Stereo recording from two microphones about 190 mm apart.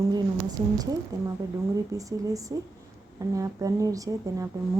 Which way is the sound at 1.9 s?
15° right (ahead or behind).